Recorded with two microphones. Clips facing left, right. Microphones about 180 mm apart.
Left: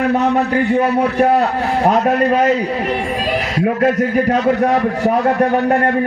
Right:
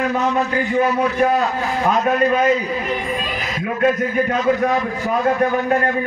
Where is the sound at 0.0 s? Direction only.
65° left (ahead or behind).